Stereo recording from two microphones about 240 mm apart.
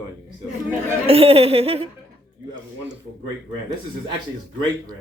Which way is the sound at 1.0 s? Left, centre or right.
Right.